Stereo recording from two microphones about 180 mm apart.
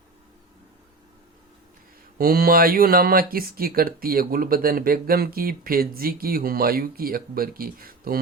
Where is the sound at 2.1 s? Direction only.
55° right (ahead or behind).